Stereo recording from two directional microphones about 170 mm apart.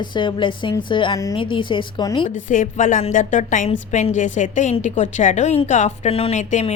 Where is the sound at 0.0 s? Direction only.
25° left (ahead or behind).